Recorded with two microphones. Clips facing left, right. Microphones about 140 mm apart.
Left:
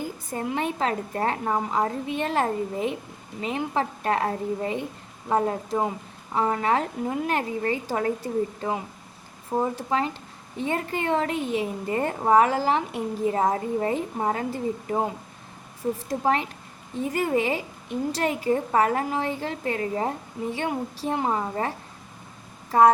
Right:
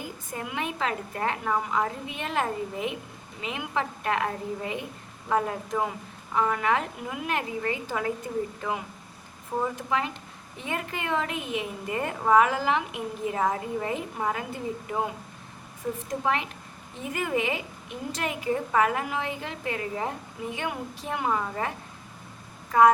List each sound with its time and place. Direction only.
0.3 s a woman's voice: 35° left (ahead or behind)
22.7 s a woman's voice: 30° left (ahead or behind)